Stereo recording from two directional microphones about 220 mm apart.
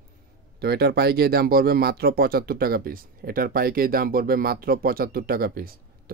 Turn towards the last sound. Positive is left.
turn(degrees=-40)  # may be behind; listen again after turning